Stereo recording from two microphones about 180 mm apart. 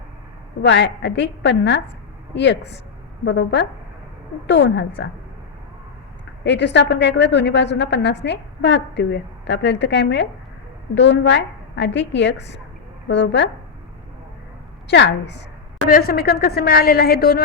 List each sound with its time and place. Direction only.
0.6 s a woman's voice: 75° left (ahead or behind)
6.4 s a woman's voice: 75° left (ahead or behind)
14.8 s a woman's voice: 80° left
15.9 s a woman's voice: 55° left (ahead or behind)